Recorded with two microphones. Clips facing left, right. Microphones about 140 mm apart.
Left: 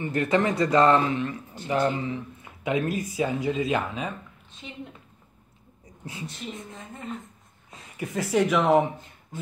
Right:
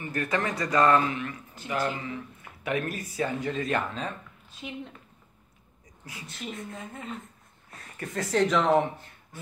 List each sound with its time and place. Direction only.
0.0 s a man's voice: 25° left (ahead or behind)
4.6 s a woman's voice: 10° right (ahead or behind)
7.7 s speech: 15° left (ahead or behind)